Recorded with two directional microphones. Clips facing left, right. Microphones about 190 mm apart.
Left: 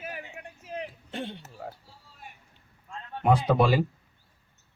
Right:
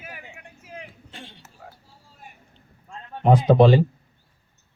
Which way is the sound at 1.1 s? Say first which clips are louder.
Left 10 dB; 55° left (ahead or behind).